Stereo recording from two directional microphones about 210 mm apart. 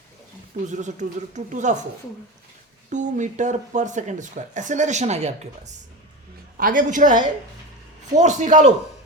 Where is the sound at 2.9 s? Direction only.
35° right (ahead or behind).